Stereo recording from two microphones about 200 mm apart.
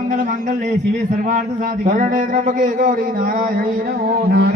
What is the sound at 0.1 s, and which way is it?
A man's voice, 40° right (ahead or behind).